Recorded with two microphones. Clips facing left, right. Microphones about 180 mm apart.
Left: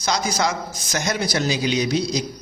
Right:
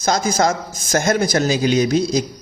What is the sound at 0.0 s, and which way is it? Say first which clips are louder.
A man's voice: right 5 dB; 50° right (ahead or behind).